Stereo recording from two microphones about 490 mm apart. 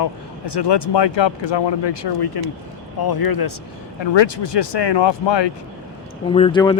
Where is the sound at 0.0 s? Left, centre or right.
Left.